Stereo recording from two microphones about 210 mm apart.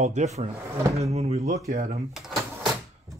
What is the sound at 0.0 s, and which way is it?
Speech, 35° right (ahead or behind).